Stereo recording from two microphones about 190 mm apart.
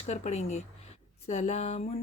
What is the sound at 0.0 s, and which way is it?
Speech, 35° left (ahead or behind).